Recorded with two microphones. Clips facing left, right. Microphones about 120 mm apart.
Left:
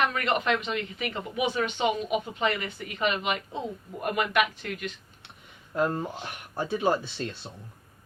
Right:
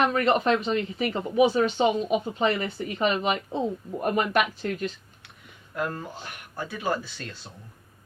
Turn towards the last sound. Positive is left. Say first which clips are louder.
# left 5 dB
turn(degrees=25)  # may be behind; listen again after turning